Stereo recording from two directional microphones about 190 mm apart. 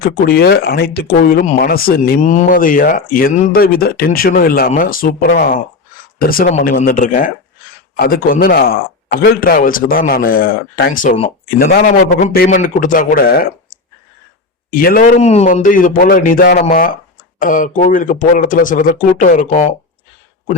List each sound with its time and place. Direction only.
0.0 s speech: 55° left (ahead or behind)